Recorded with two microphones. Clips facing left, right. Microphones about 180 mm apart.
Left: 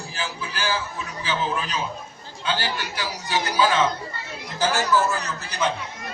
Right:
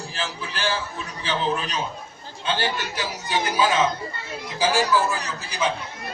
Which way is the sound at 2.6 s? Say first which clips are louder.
Right 2 dB; 20° right (ahead or behind).